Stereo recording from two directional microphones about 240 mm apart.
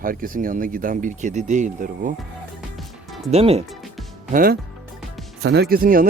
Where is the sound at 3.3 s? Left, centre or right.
Right.